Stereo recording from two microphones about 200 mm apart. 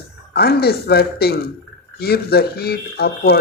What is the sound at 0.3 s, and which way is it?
Speech, 50° left (ahead or behind).